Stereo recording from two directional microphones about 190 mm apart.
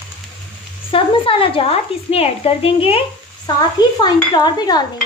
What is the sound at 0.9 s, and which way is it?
A woman's voice, 25° left (ahead or behind).